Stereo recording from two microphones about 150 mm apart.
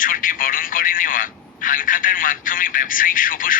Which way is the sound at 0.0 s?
65° left (ahead or behind).